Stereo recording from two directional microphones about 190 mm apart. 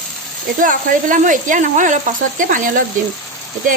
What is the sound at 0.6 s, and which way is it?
A woman's voice, 45° right (ahead or behind).